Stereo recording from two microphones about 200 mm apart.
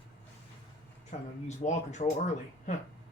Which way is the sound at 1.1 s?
35° left (ahead or behind).